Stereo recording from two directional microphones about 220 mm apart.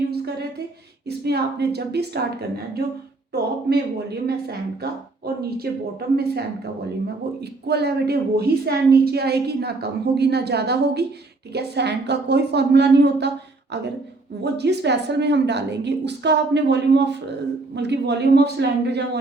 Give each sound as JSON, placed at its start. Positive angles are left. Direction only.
{"t": 1.0, "sound": "a woman's voice", "side_deg": -45}
{"t": 3.3, "sound": "a woman's voice", "side_deg": -45}
{"t": 7.7, "sound": "a woman's voice", "side_deg": -50}
{"t": 14.4, "sound": "a woman's voice", "side_deg": -50}